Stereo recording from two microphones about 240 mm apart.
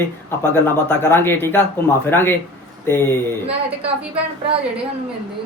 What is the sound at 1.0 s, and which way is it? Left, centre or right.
A man's voice, centre.